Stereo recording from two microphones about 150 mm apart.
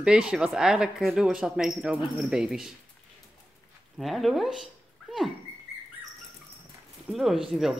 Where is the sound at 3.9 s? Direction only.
Centre (ahead or behind).